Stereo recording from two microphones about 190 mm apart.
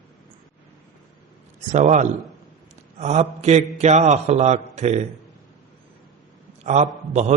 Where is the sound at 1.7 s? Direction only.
40° right (ahead or behind).